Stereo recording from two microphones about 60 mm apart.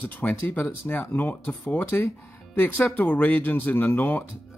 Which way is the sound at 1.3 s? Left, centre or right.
Left.